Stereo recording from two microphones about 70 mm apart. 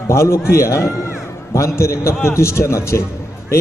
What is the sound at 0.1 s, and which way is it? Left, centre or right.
A man's voice, left.